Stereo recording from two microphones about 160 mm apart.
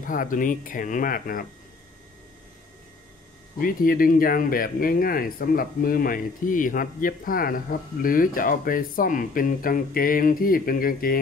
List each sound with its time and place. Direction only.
0.0 s speech: 60° left (ahead or behind)
3.5 s speech: 65° left (ahead or behind)